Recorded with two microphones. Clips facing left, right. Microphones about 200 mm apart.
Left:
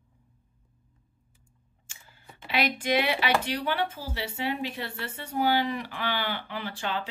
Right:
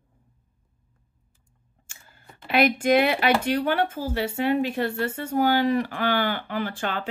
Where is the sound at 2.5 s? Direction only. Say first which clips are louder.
Right 7 dB; 50° right (ahead or behind).